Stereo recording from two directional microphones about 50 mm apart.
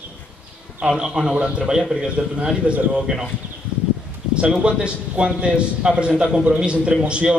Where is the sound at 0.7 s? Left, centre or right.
Centre.